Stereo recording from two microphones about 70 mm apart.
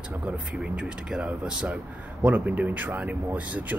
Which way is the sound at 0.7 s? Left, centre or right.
Centre.